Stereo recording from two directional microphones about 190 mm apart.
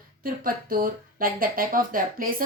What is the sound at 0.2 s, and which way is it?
A woman's voice, 50° right (ahead or behind).